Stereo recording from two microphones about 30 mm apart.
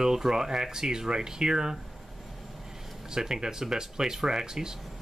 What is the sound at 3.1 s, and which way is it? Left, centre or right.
Speech, right.